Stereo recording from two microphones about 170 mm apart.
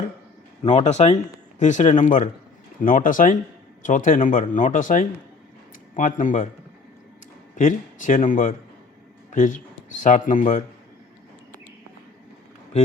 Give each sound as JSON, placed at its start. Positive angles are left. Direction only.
{"t": 0.6, "sound": "speech", "side_deg": 40}
{"t": 7.5, "sound": "speech", "side_deg": 50}